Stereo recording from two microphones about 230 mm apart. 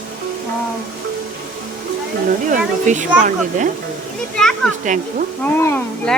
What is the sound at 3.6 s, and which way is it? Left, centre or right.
Speech, right.